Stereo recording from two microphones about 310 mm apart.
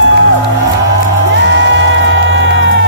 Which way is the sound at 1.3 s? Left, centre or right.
Right.